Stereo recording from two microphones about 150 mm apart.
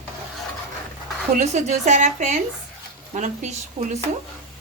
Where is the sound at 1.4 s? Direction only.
50° right (ahead or behind).